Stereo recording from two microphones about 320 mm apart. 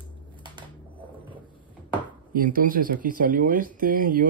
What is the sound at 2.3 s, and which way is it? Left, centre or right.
Speech, right.